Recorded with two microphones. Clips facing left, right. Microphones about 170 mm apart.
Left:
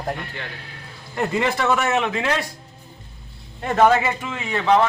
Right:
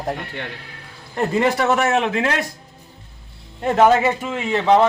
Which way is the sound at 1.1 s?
35° right (ahead or behind).